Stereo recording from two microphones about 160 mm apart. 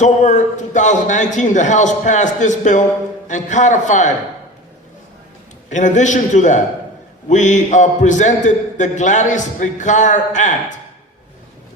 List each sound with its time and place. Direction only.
0.0 s a man's voice: 50° left (ahead or behind)
5.6 s a man's voice: 50° left (ahead or behind)